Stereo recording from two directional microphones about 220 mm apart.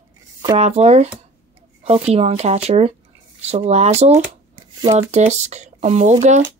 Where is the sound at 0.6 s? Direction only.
30° right (ahead or behind).